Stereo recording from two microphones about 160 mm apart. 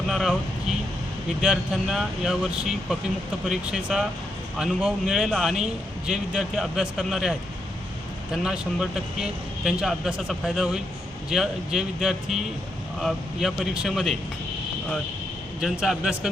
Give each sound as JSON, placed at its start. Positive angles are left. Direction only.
{"t": 0.1, "sound": "speech", "side_deg": 0}
{"t": 1.4, "sound": "a man's voice", "side_deg": -5}
{"t": 15.8, "sound": "a man's voice", "side_deg": -5}